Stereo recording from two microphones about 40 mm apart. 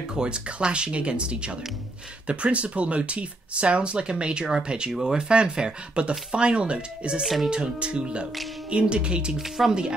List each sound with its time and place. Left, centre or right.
0.1 s speech: right
9.4 s speech: centre